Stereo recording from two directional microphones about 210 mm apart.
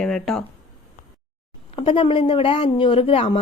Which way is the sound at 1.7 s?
25° left (ahead or behind).